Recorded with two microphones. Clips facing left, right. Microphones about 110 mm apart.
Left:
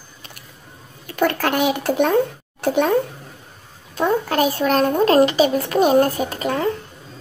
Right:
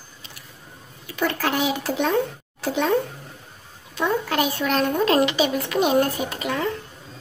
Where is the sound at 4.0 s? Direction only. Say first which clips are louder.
Left 4 dB; 40° left (ahead or behind).